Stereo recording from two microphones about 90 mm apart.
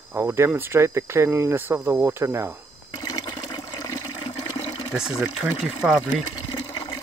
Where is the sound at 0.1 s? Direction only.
25° right (ahead or behind).